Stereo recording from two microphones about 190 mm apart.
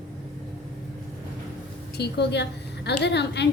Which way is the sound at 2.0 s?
65° left (ahead or behind).